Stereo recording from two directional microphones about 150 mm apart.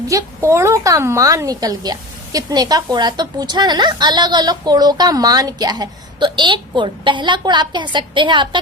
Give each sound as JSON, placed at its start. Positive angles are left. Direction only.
{"t": 0.1, "sound": "a woman's voice", "side_deg": -20}